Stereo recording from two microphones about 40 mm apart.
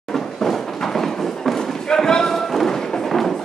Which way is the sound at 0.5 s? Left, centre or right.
Centre.